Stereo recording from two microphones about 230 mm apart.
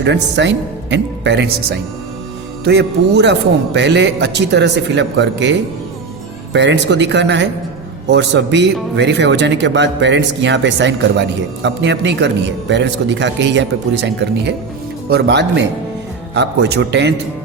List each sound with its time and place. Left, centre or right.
0.0 s speech: right
2.6 s speech: right